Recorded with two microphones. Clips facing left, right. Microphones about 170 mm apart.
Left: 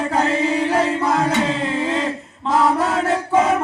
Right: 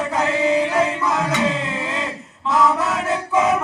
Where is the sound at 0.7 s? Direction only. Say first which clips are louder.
Left 2 dB; 35° left (ahead or behind).